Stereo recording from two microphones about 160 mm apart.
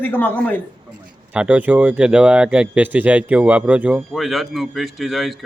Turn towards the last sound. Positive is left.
turn(degrees=0)  # may be behind; listen again after turning